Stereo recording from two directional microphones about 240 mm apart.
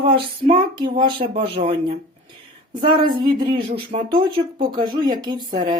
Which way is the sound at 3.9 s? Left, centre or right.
Centre.